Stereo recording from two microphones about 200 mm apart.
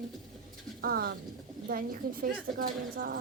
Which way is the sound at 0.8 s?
50° right (ahead or behind).